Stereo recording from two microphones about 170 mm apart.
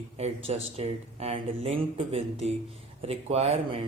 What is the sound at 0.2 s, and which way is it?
Speech, 40° right (ahead or behind).